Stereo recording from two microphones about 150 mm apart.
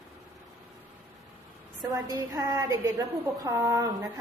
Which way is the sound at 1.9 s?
20° right (ahead or behind).